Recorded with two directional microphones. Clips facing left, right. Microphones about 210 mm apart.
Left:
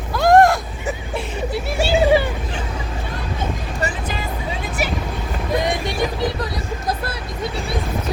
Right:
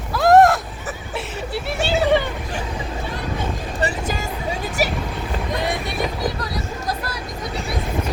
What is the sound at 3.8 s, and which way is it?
Vehicle, 45° right (ahead or behind).